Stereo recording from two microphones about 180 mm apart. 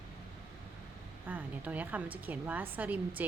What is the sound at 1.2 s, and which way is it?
A woman's voice, 10° right (ahead or behind).